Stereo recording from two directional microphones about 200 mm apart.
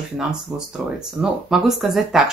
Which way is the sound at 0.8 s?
5° right (ahead or behind).